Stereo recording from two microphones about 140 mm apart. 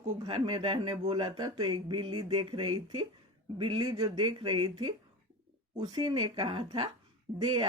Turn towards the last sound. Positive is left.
turn(degrees=-35)  # may be behind; listen again after turning